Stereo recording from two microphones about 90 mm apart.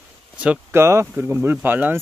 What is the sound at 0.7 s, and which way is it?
Speech, 30° right (ahead or behind).